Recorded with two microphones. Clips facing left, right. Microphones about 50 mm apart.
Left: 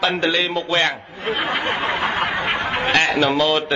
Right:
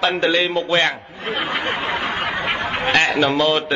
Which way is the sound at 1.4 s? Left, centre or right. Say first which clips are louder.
Left 1 dB; left.